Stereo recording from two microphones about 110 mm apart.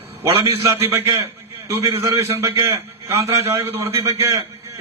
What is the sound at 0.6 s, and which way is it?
A man's voice, 25° right (ahead or behind).